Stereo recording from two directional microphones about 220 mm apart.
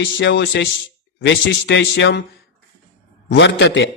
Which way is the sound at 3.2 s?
55° left (ahead or behind).